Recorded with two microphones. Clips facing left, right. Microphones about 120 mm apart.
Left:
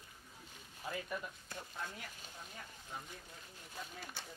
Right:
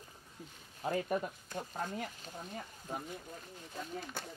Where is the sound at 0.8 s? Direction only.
40° right (ahead or behind).